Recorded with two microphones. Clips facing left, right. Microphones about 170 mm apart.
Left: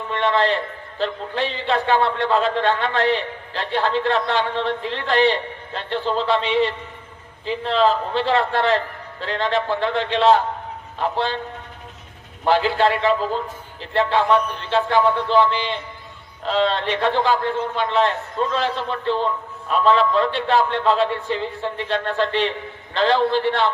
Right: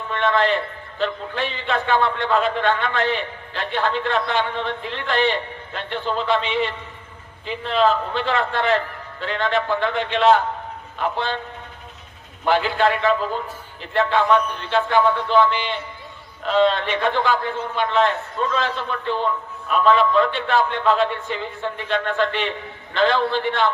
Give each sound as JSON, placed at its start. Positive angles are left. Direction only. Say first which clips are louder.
{"t": 0.1, "sound": "a man's voice", "louder": "even", "side_deg": 35}
{"t": 12.5, "sound": "a man's voice", "louder": "left 1 dB", "side_deg": 35}